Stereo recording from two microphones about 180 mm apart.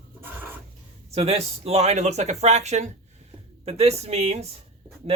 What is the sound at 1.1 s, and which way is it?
Speech, 35° right (ahead or behind).